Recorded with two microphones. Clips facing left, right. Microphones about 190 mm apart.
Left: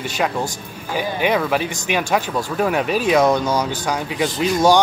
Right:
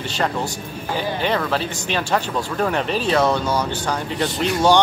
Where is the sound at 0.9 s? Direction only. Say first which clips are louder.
Left 3 dB; 10° left (ahead or behind).